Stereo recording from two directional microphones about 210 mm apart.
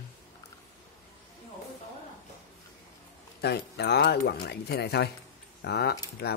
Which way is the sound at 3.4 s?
50° left (ahead or behind).